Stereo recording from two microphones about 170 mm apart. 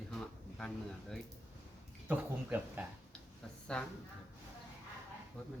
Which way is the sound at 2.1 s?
10° right (ahead or behind).